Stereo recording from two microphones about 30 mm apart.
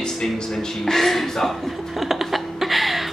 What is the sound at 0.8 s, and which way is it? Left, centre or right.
Speech, centre.